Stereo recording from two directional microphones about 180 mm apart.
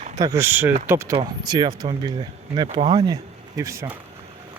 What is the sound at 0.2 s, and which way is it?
Speech, 15° right (ahead or behind).